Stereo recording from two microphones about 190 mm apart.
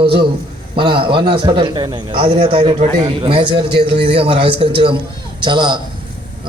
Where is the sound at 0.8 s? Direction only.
25° right (ahead or behind).